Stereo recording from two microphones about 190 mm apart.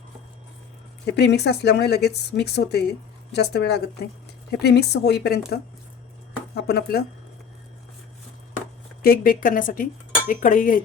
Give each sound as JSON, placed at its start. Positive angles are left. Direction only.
{"t": 1.0, "sound": "speech", "side_deg": 60}
{"t": 6.5, "sound": "speech", "side_deg": 55}
{"t": 9.0, "sound": "speech", "side_deg": 50}